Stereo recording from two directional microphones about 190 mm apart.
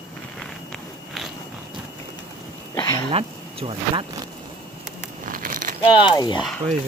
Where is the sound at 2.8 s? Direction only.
20° left (ahead or behind).